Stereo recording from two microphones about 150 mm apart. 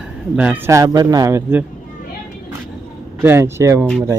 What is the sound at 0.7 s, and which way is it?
Speech, 25° right (ahead or behind).